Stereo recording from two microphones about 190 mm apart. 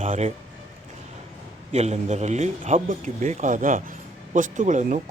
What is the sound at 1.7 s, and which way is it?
A man's voice, 35° right (ahead or behind).